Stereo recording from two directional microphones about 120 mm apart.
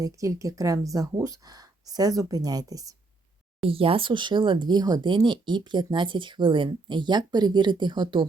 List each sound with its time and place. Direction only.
0.0 s speech: 25° right (ahead or behind)
3.7 s speech: 50° right (ahead or behind)